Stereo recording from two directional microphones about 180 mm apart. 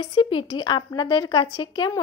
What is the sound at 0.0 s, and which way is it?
A woman's voice, 30° left (ahead or behind).